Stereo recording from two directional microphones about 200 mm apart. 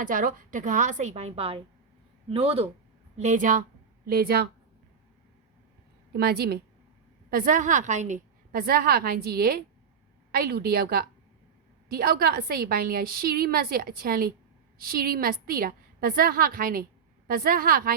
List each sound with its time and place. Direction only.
0.0 s a woman's voice: 40° right (ahead or behind)
6.1 s a woman's voice: 50° right (ahead or behind)